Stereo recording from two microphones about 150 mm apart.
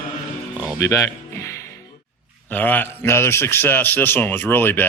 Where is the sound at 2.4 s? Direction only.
10° left (ahead or behind).